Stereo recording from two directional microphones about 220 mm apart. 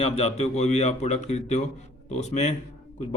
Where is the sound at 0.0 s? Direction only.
30° left (ahead or behind).